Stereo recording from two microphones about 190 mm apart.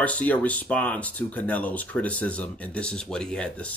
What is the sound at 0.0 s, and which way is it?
Speech, 10° left (ahead or behind).